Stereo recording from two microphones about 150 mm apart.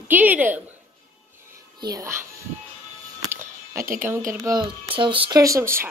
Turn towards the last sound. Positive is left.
turn(degrees=-15)  # may be behind; listen again after turning